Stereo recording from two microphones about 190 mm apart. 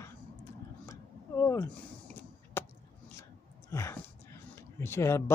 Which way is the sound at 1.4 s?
15° left (ahead or behind).